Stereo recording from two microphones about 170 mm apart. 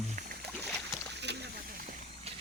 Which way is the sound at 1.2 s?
90° right.